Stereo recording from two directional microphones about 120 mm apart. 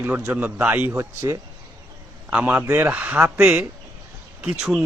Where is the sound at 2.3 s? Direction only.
10° right (ahead or behind).